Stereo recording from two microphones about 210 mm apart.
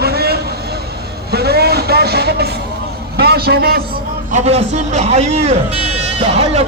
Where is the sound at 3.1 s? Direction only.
50° right (ahead or behind).